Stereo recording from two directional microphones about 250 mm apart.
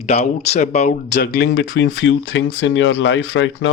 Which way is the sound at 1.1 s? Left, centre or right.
Left.